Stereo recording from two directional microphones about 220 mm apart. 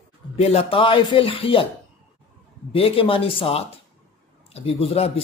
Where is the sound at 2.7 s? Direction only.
25° left (ahead or behind).